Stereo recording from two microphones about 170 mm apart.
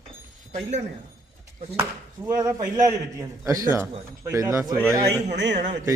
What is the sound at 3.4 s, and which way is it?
A man's voice, 20° right (ahead or behind).